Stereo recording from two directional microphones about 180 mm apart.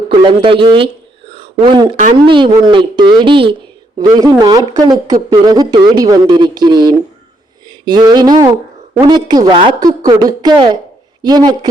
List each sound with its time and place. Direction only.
0.1 s speech: 25° right (ahead or behind)
1.3 s a sound: 30° right (ahead or behind)
2.2 s speech: 25° right (ahead or behind)